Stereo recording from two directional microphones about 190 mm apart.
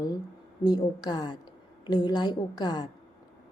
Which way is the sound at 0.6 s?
20° left (ahead or behind).